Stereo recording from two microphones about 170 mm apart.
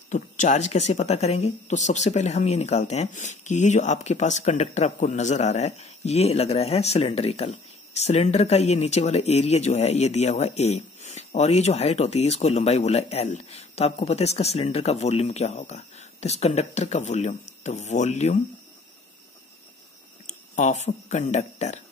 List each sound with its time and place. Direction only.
0.1 s speech: 45° left (ahead or behind)
20.2 s speech: 45° left (ahead or behind)